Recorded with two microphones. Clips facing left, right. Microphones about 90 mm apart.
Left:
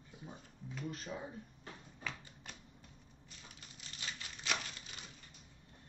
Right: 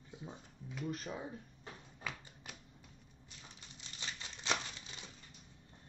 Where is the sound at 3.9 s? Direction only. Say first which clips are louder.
Even; 25° right (ahead or behind).